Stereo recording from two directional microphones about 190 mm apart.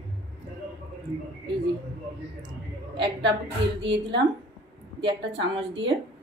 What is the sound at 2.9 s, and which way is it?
A woman's voice, 65° right (ahead or behind).